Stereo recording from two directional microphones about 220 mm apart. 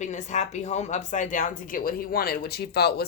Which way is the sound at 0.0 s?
35° left (ahead or behind).